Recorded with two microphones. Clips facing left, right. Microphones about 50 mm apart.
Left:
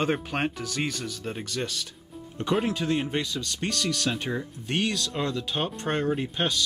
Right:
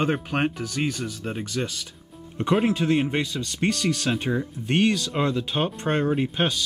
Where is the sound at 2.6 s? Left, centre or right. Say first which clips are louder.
Right 5 dB; right.